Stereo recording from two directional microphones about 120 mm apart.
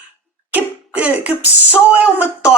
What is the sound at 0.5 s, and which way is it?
Cough, 15° right (ahead or behind).